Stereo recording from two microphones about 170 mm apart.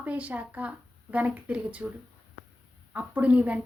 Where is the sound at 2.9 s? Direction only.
10° right (ahead or behind).